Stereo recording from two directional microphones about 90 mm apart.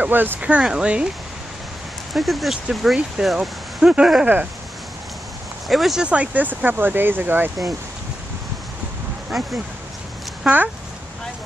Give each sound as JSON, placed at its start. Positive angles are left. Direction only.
{"t": 0.0, "sound": "speech", "side_deg": -20}
{"t": 2.1, "sound": "speech", "side_deg": 0}
{"t": 5.7, "sound": "speech", "side_deg": 0}
{"t": 10.4, "sound": "speech", "side_deg": -20}